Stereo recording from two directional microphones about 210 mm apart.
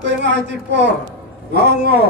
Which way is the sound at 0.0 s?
55° right (ahead or behind).